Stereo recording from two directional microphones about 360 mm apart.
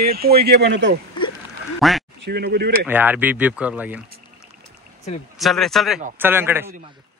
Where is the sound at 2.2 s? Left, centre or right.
Right.